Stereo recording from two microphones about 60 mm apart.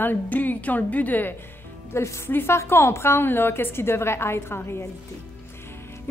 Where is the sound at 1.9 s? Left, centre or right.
Left.